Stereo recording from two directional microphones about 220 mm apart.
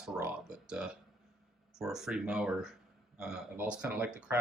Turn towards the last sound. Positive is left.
turn(degrees=-5)  # may be behind; listen again after turning